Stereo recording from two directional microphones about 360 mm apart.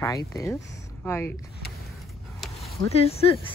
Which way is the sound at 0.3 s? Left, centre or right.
Centre.